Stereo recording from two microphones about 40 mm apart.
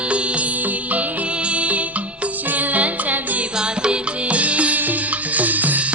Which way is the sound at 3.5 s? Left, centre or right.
Right.